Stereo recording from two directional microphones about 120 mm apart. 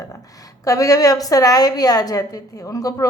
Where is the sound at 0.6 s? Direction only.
30° left (ahead or behind).